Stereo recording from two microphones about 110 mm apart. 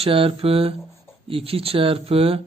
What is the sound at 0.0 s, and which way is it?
Speech, 55° right (ahead or behind).